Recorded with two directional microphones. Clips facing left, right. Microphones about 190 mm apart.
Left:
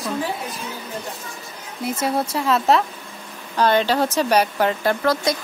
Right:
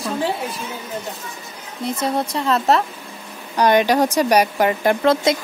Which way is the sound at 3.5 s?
15° right (ahead or behind).